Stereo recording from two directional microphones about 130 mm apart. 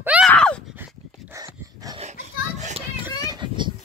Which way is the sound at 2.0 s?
65° right (ahead or behind).